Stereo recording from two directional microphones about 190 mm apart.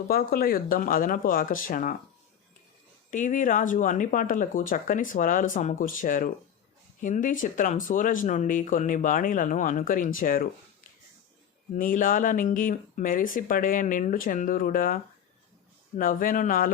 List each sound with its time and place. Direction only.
0.1 s speech: 50° left (ahead or behind)
3.1 s speech: 45° left (ahead or behind)
11.7 s speech: 45° left (ahead or behind)
16.0 s speech: 45° left (ahead or behind)